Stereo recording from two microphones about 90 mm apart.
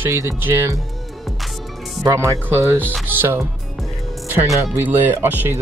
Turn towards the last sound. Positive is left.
turn(degrees=-20)  # may be behind; listen again after turning